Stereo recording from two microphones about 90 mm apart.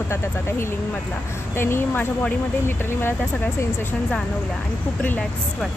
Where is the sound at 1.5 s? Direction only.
25° left (ahead or behind).